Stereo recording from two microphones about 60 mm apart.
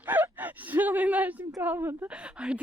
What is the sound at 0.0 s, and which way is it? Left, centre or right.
Gasp, right.